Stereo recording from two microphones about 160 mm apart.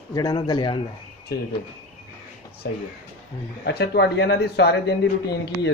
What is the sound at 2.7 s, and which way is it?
Speech, 90° left.